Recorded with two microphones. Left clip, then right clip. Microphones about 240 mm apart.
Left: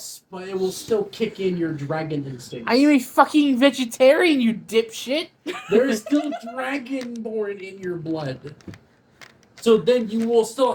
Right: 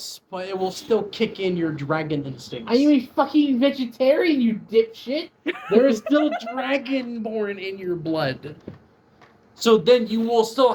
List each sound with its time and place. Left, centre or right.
0.3 s speech: right
2.9 s a woman's voice: left
5.6 s speech: right
9.6 s speech: right